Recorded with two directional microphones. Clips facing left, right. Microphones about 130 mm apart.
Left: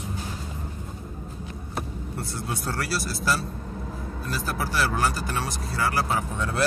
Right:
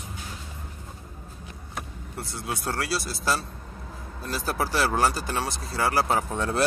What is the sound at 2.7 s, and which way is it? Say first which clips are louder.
Speech: right 1 dB; 20° right (ahead or behind).